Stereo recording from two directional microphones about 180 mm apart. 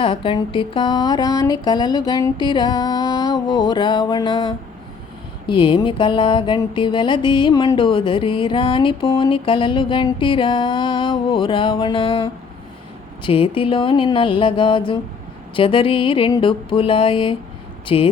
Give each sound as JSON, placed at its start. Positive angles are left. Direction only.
{"t": 0.0, "sound": "music", "side_deg": 30}